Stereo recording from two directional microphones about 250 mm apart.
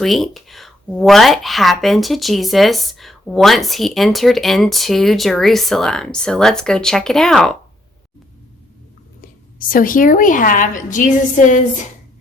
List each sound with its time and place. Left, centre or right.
0.0 s speech: centre
9.6 s a woman's voice: left